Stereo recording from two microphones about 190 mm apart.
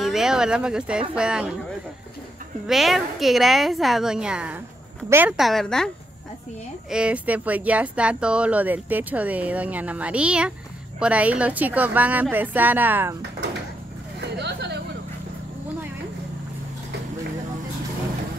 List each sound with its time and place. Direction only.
0.0 s a woman's voice: centre (ahead or behind)
2.6 s a woman's voice: centre (ahead or behind)
6.9 s speech: 5° right (ahead or behind)
14.2 s a sound: 60° right (ahead or behind)